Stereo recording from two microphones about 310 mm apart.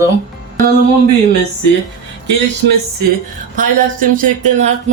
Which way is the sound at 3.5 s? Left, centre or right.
Right.